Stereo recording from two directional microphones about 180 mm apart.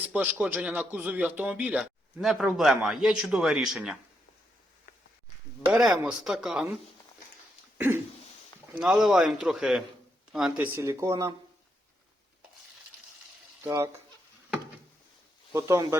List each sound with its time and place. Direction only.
0.1 s a man's voice: 5° right (ahead or behind)
5.7 s a man's voice: 5° right (ahead or behind)
8.7 s a man's voice: 5° right (ahead or behind)
10.8 s speech: 15° right (ahead or behind)
13.7 s speech: 20° right (ahead or behind)
15.5 s speech: 15° right (ahead or behind)